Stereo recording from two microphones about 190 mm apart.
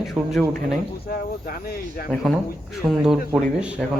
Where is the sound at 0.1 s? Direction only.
Centre (ahead or behind).